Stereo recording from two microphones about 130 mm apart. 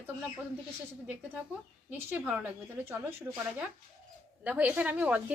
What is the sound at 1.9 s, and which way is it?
A woman's voice, 15° right (ahead or behind).